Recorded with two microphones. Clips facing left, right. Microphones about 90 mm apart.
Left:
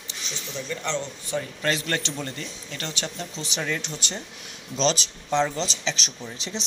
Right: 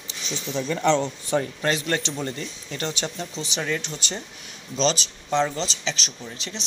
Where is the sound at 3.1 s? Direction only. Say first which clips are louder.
Right 2 dB; centre (ahead or behind).